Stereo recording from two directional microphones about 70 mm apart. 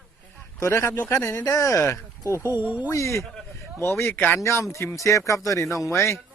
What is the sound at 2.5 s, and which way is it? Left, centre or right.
Speech, right.